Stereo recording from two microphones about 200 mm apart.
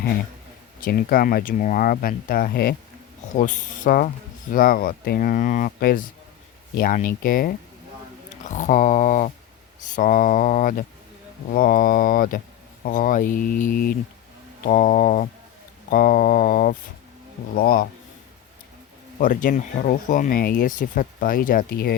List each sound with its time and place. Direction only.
0.8 s speech: 45° left (ahead or behind)
3.3 s speech: 40° left (ahead or behind)
19.2 s speech: 40° left (ahead or behind)